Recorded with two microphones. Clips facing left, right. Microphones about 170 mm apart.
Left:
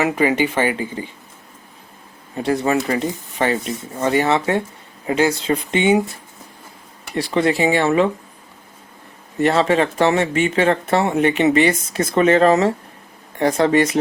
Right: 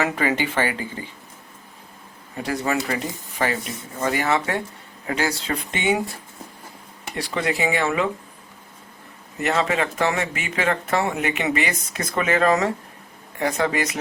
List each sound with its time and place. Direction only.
0.0 s speech: 15° left (ahead or behind)
2.3 s speech: 25° left (ahead or behind)
7.2 s speech: 30° left (ahead or behind)
9.4 s speech: 35° left (ahead or behind)